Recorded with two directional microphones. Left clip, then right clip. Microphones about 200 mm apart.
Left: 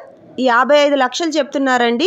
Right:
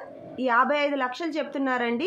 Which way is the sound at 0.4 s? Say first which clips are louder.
Left 10 dB; 35° left (ahead or behind).